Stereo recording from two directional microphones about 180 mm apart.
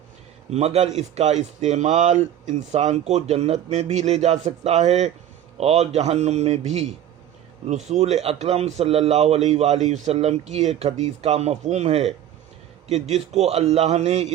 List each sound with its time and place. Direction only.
0.5 s speech: 35° right (ahead or behind)